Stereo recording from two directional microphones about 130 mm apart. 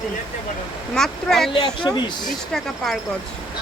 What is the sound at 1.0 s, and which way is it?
Speech, 5° left (ahead or behind).